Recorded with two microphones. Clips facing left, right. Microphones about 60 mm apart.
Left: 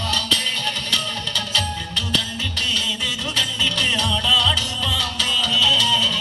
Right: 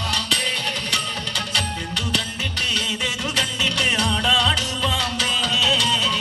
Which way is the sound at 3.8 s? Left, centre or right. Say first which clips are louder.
Right 2 dB; right.